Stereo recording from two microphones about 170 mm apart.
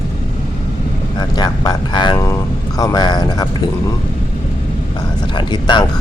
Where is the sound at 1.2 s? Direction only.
25° left (ahead or behind).